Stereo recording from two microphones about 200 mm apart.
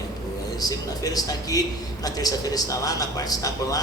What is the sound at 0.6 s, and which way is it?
A man's voice, 20° left (ahead or behind).